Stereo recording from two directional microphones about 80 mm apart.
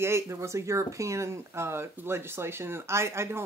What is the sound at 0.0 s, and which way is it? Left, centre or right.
Speech, right.